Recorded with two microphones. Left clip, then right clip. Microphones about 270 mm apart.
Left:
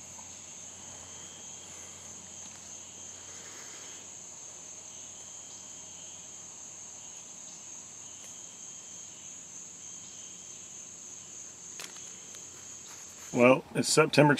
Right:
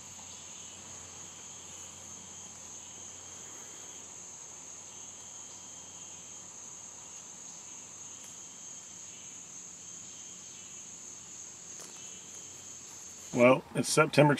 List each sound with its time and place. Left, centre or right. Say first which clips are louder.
13.3 s speech: left 1 dB; centre